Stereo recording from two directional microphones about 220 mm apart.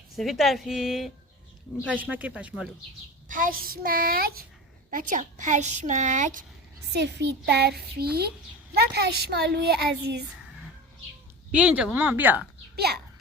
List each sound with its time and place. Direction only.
0.2 s a woman's voice: centre (ahead or behind)
3.2 s a child's voice: 40° right (ahead or behind)
6.9 s a woman's voice: 50° right (ahead or behind)
11.5 s speech: 5° right (ahead or behind)
12.7 s a child's voice: 45° right (ahead or behind)